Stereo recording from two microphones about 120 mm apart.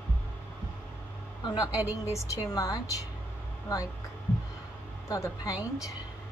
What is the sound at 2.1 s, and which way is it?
Speech, 30° left (ahead or behind).